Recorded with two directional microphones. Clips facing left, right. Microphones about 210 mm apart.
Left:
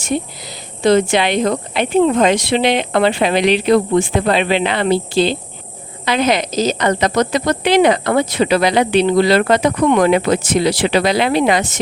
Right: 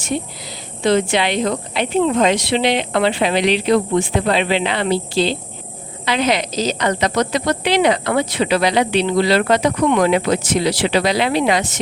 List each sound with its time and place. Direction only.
0.9 s speech: 45° left (ahead or behind)